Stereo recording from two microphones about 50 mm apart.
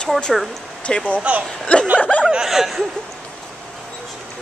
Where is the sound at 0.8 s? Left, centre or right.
Left.